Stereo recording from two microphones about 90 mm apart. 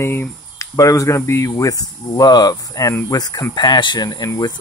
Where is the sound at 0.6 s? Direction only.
35° left (ahead or behind).